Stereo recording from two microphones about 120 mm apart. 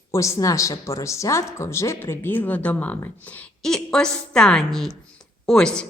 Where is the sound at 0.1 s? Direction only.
25° left (ahead or behind).